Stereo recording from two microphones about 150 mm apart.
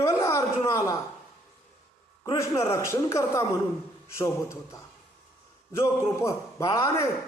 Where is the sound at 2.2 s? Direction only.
20° left (ahead or behind).